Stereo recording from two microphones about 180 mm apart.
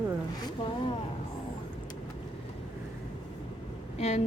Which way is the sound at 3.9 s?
40° left (ahead or behind).